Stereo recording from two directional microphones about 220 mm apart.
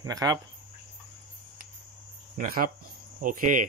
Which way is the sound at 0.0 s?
15° right (ahead or behind).